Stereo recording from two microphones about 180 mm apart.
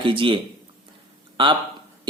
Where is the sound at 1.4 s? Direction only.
30° right (ahead or behind).